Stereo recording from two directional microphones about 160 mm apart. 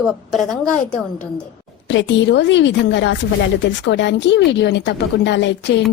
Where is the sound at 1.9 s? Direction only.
90° left.